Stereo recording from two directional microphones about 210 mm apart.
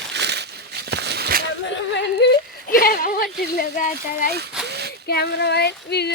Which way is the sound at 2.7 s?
45° left (ahead or behind).